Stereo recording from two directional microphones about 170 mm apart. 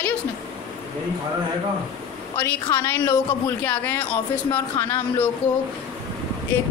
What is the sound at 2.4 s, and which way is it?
A woman's voice, 15° left (ahead or behind).